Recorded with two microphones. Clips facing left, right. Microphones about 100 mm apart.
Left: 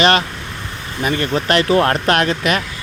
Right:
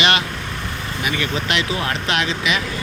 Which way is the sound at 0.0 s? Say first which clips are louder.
Left 5 dB; 40° left (ahead or behind).